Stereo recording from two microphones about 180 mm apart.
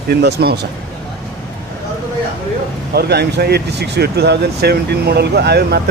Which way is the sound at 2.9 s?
65° right (ahead or behind).